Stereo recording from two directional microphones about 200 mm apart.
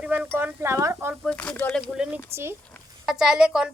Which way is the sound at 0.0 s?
5° right (ahead or behind).